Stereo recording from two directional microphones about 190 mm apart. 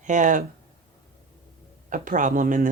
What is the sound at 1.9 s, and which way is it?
Speech, 45° right (ahead or behind).